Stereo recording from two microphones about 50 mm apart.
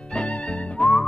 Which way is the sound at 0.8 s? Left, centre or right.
Centre.